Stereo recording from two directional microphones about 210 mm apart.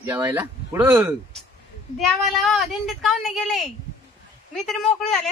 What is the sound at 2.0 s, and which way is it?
A woman's voice, centre (ahead or behind).